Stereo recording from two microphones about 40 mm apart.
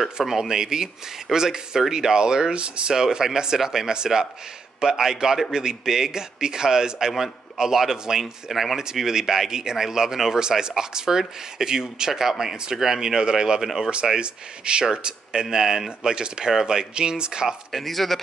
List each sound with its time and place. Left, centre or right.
0.0 s a man's voice: centre; by 17.6 s right
17.6 s speech: centre